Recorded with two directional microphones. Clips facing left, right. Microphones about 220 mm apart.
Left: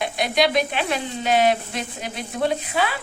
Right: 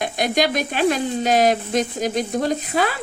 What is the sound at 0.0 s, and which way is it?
Speech, 45° right (ahead or behind).